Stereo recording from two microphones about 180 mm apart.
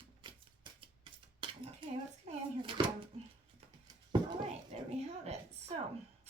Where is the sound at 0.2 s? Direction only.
25° right (ahead or behind).